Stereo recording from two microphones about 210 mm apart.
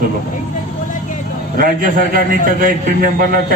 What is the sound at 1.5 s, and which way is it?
A man's voice, 40° right (ahead or behind).